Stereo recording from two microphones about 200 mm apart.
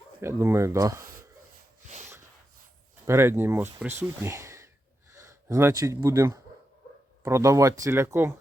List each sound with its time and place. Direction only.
0.2 s speech: 10° right (ahead or behind)
3.1 s speech: 10° right (ahead or behind)